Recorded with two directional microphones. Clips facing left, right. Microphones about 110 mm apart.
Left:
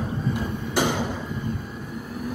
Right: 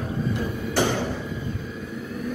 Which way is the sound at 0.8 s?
15° left (ahead or behind).